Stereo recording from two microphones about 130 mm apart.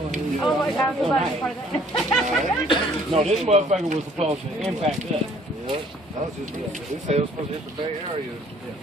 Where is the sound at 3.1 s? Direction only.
55° right (ahead or behind).